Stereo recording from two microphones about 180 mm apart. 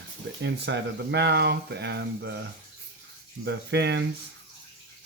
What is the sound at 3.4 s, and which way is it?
Speech, 70° right (ahead or behind).